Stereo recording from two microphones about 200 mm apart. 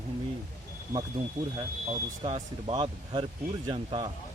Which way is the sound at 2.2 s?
25° right (ahead or behind).